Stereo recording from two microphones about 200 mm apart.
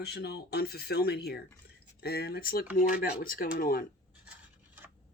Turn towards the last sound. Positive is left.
turn(degrees=45)  # may be behind; listen again after turning